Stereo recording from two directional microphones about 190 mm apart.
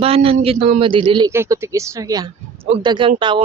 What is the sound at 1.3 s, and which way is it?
Speech, 15° right (ahead or behind).